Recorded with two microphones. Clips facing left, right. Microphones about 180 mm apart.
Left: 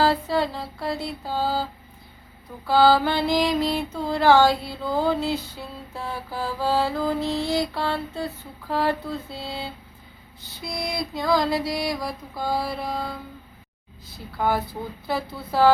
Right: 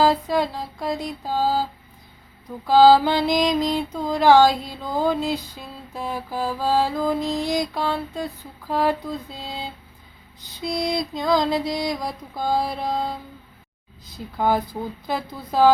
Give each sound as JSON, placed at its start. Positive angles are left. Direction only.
{"t": 0.0, "sound": "mantra", "side_deg": -15}
{"t": 2.6, "sound": "mantra", "side_deg": -20}
{"t": 14.3, "sound": "mantra", "side_deg": -15}